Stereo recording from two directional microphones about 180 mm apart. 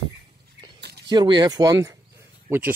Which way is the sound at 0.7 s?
65° right (ahead or behind).